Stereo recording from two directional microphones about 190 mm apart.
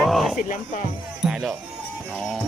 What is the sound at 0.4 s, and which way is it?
Speech, 45° left (ahead or behind).